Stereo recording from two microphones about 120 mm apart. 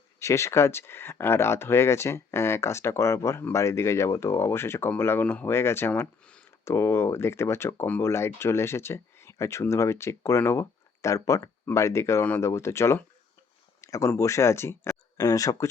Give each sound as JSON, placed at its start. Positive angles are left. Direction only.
{"t": 0.2, "sound": "speech", "side_deg": 25}
{"t": 6.7, "sound": "speech", "side_deg": 20}